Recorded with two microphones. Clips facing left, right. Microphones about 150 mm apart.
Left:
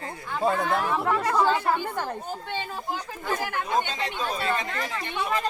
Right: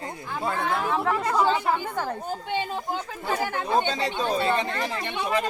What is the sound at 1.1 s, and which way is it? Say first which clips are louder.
Speech: left 1 dB; 10° right (ahead or behind).